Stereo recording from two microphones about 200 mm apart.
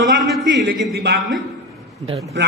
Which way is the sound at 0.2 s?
Centre (ahead or behind).